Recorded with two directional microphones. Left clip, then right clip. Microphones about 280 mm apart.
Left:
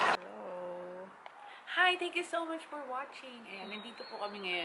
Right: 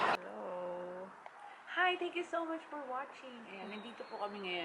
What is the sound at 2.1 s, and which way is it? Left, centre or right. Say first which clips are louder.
Speech: left 3 dB; centre.